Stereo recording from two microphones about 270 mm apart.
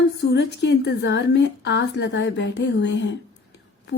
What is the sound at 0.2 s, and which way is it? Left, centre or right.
A woman's voice, left.